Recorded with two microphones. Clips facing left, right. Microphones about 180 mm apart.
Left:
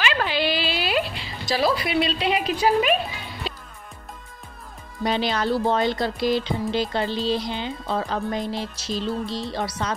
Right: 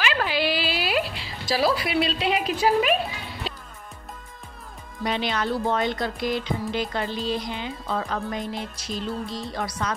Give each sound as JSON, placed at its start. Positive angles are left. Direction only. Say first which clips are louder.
{"t": 0.0, "sound": "a sound", "louder": "left 1 dB", "side_deg": -5}
{"t": 1.5, "sound": "a woman's voice", "louder": "left 1 dB", "side_deg": -5}
{"t": 3.4, "sound": "music", "louder": "left 2 dB", "side_deg": 0}
{"t": 5.0, "sound": "speech", "louder": "left 3 dB", "side_deg": 35}